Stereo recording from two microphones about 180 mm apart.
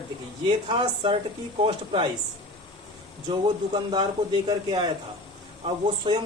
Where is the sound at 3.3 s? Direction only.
25° right (ahead or behind).